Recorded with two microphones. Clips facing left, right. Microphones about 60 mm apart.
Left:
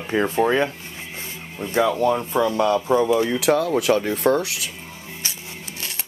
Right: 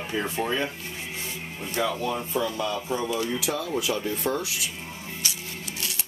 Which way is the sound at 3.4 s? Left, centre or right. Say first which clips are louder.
Left 9 dB; left.